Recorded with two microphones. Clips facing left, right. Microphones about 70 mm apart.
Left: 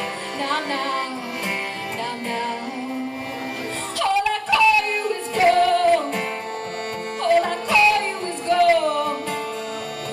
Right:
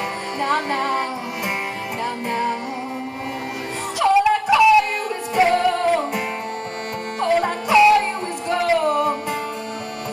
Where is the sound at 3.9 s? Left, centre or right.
Centre.